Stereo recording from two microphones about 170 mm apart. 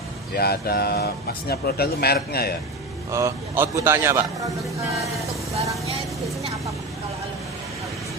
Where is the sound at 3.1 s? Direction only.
20° right (ahead or behind).